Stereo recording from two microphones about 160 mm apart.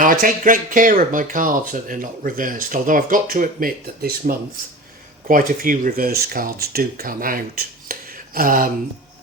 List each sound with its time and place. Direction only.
0.0 s speech: 60° right (ahead or behind)